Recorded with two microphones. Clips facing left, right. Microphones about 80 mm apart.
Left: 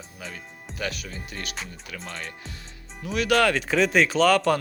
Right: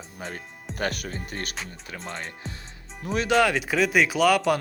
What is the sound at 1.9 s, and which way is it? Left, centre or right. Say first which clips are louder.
Music: right 3 dB; right.